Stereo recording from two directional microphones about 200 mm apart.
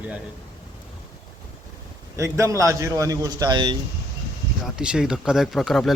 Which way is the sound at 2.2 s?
15° right (ahead or behind).